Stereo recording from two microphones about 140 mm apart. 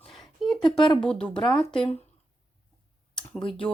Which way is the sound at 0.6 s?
Centre (ahead or behind).